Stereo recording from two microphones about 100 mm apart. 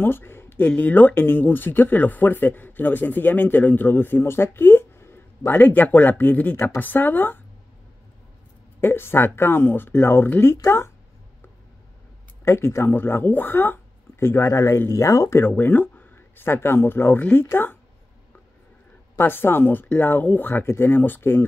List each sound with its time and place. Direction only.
0.0 s speech: 20° left (ahead or behind)
8.8 s speech: 25° left (ahead or behind)
12.4 s speech: 25° left (ahead or behind)
19.1 s speech: 20° left (ahead or behind)